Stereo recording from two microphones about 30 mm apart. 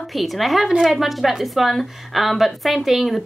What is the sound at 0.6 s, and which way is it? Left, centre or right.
Speech, centre.